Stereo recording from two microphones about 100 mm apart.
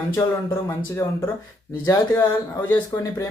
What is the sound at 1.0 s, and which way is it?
Speech, 25° left (ahead or behind).